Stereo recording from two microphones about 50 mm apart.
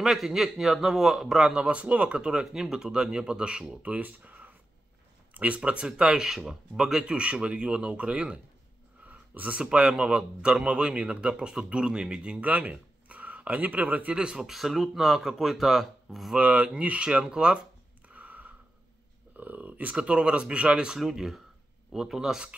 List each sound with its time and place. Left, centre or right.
0.0 s speech: centre
1.6 s a man's voice: right
3.8 s speech: right
5.3 s a sound: right
5.6 s a man's voice: centre
9.0 s a sound: right
9.6 s a man's voice: centre
14.1 s speech: centre
14.4 s speech: centre
16.3 s a man's voice: right
18.0 s a sound: right
19.3 s speech: right
20.0 s a man's voice: right